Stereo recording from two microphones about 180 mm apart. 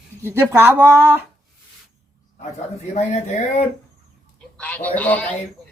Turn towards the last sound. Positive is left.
turn(degrees=10)  # may be behind; listen again after turning